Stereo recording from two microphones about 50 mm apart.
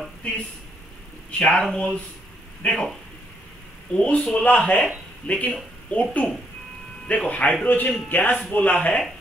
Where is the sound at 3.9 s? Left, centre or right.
Left.